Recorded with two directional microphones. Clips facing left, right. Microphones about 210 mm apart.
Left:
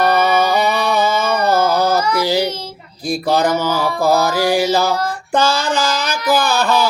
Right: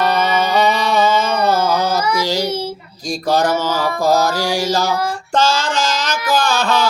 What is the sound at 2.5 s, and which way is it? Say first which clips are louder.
Child singing: right 5 dB; 10° right (ahead or behind).